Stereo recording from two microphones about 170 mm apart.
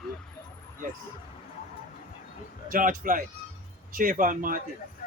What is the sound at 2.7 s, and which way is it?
Speech, 55° right (ahead or behind).